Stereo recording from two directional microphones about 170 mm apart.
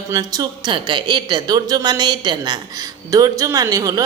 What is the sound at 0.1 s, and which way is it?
Speech, 25° right (ahead or behind).